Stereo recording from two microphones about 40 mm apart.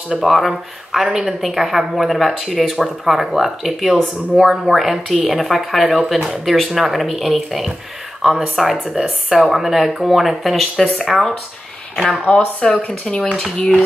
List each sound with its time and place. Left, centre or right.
0.2 s speech: centre
1.0 s a woman's voice: centre
1.4 s speech: centre
12.3 s speech: left